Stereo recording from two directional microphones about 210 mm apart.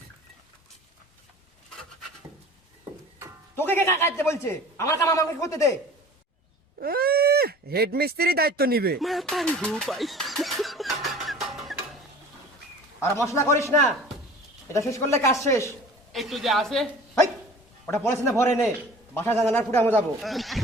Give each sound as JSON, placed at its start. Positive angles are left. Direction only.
{"t": 3.5, "sound": "a man's voice", "side_deg": 10}
{"t": 6.7, "sound": "speech", "side_deg": -45}
{"t": 9.0, "sound": "a sound", "side_deg": 0}
{"t": 13.0, "sound": "a man's voice", "side_deg": 15}
{"t": 16.1, "sound": "a man's voice", "side_deg": 0}
{"t": 18.0, "sound": "a man's voice", "side_deg": 15}